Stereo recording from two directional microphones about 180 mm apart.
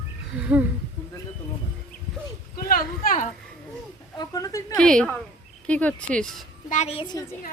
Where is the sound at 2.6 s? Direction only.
55° left (ahead or behind).